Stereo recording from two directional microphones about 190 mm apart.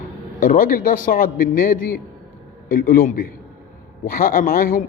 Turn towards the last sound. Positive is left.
turn(degrees=50)  # may be behind; listen again after turning